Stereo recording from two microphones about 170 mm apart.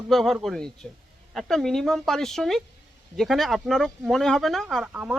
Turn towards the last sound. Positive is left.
turn(degrees=-5)  # may be behind; listen again after turning